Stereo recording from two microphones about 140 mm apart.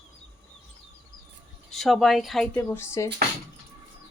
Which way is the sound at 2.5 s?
15° left (ahead or behind).